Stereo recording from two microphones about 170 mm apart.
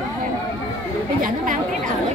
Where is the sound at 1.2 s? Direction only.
50° right (ahead or behind).